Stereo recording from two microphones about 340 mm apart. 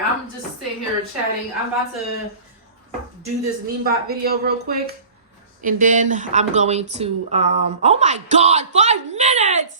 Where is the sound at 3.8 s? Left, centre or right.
Right.